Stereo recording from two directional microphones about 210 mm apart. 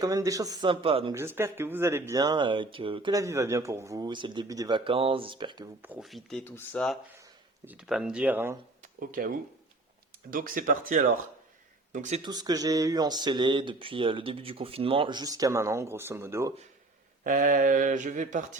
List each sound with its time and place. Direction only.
0.0 s speech: 15° right (ahead or behind)
1.1 s speech: 10° right (ahead or behind)
5.8 s speech: 5° right (ahead or behind)
7.2 s speech: 10° right (ahead or behind)
8.8 s speech: 40° right (ahead or behind)
12.2 s speech: 20° right (ahead or behind)
17.2 s speech: 40° right (ahead or behind)